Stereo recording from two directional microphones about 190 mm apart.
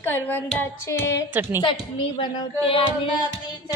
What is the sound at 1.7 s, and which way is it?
Music, 25° left (ahead or behind).